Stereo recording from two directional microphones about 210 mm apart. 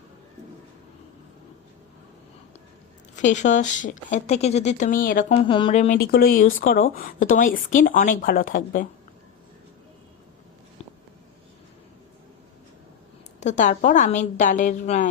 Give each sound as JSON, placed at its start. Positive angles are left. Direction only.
{"t": 3.2, "sound": "a woman's voice", "side_deg": 35}
{"t": 5.5, "sound": "speech", "side_deg": 25}
{"t": 6.0, "sound": "a woman's voice", "side_deg": 45}
{"t": 13.4, "sound": "a woman's voice", "side_deg": 35}